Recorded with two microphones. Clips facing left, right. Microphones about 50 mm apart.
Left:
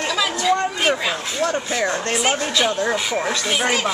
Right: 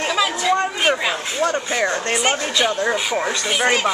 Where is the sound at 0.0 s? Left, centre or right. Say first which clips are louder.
Right 1 dB; centre.